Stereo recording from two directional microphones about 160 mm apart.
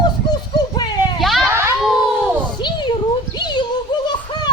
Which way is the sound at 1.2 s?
Centre (ahead or behind).